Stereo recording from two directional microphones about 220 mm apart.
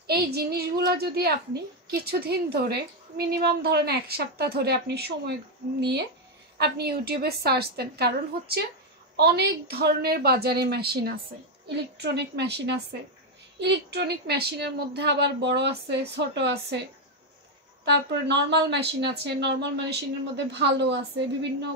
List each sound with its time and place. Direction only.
0.0 s a woman's voice: 45° right (ahead or behind)
17.8 s a woman's voice: 50° right (ahead or behind)